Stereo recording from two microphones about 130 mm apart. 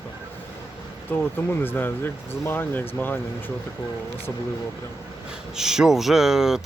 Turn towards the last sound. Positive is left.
turn(degrees=-5)  # may be behind; listen again after turning